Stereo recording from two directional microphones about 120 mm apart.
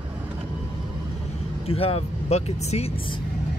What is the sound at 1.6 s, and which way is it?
Speech, 55° left (ahead or behind).